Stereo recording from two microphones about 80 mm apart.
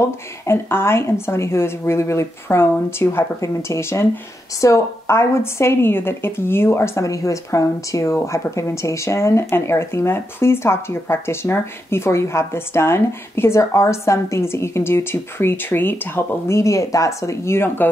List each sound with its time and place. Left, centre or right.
0.5 s a woman's voice: left